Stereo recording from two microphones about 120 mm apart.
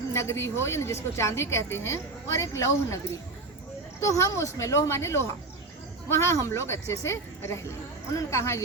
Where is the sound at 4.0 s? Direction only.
25° left (ahead or behind).